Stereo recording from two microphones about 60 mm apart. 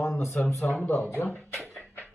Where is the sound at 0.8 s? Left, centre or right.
Left.